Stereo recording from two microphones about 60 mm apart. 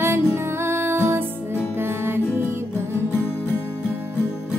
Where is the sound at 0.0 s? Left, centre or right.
Right.